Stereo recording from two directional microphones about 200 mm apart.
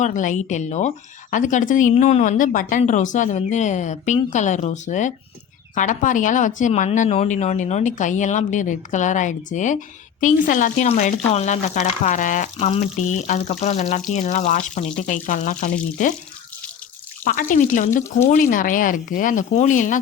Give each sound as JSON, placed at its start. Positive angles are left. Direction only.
{"t": 0.0, "sound": "speech", "side_deg": 40}
{"t": 17.2, "sound": "speech", "side_deg": 40}